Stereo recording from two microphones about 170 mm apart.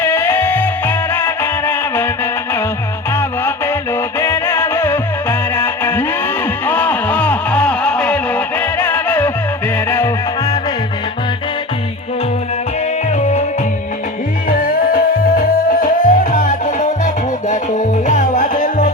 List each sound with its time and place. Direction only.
0.0 s music: 15° left (ahead or behind)
3.2 s music: 15° left (ahead or behind)
13.1 s music: 40° left (ahead or behind)
14.5 s music: 55° left (ahead or behind)